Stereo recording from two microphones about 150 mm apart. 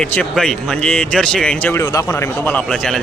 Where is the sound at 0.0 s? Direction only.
5° left (ahead or behind).